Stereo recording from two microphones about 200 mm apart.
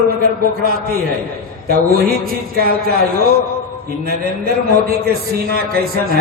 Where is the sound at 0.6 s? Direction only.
50° right (ahead or behind).